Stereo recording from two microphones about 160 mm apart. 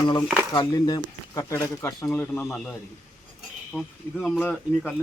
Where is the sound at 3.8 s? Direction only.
10° left (ahead or behind).